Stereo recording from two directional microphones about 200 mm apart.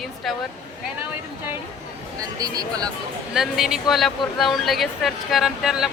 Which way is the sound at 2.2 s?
20° right (ahead or behind).